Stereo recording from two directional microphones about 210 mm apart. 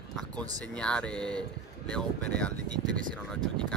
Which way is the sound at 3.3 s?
5° left (ahead or behind).